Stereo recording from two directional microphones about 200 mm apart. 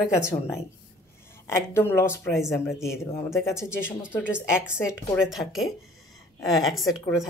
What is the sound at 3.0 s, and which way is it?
Speech, 15° left (ahead or behind).